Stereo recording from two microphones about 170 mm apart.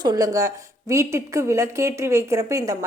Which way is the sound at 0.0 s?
20° right (ahead or behind).